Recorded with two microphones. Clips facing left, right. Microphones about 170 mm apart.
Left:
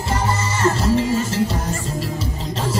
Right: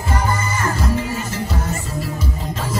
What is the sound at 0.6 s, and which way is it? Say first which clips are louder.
Music: left 7 dB; 30° left (ahead or behind).